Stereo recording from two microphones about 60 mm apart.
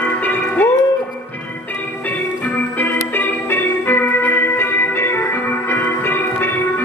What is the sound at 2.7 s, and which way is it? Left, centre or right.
Music, left.